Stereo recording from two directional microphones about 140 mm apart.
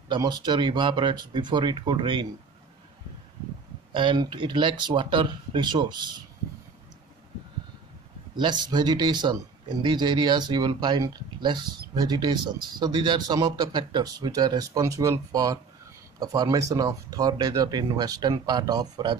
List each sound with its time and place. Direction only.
0.1 s speech: 35° right (ahead or behind)
3.9 s speech: 35° right (ahead or behind)
8.4 s speech: 30° right (ahead or behind)